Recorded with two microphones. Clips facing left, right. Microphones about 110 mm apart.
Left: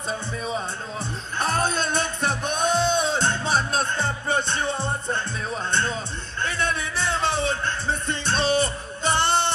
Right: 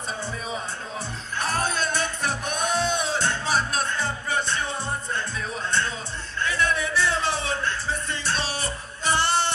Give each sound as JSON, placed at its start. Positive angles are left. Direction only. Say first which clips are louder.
{"t": 1.4, "sound": "music", "louder": "left 2 dB", "side_deg": 25}